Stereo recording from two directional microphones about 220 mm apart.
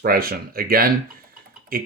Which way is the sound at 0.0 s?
40° right (ahead or behind).